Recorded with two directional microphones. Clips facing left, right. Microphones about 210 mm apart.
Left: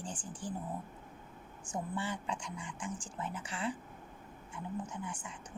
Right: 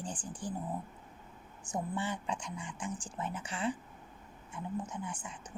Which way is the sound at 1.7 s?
20° right (ahead or behind).